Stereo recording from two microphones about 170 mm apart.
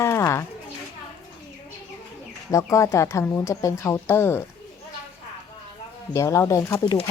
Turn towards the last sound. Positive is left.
turn(degrees=20)  # may be behind; listen again after turning